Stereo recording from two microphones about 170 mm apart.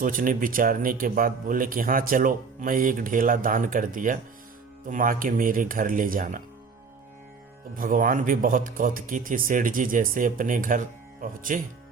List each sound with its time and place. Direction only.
0.0 s a man's voice: 55° right (ahead or behind)
7.8 s a man's voice: 55° right (ahead or behind)